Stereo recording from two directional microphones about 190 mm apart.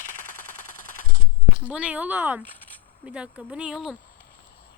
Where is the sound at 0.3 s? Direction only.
45° right (ahead or behind).